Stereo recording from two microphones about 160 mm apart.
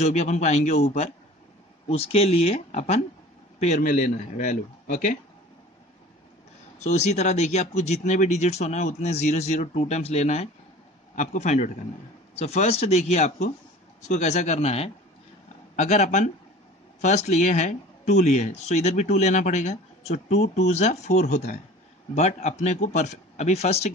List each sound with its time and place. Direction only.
0.0 s speech: 45° left (ahead or behind)
6.8 s speech: 45° left (ahead or behind)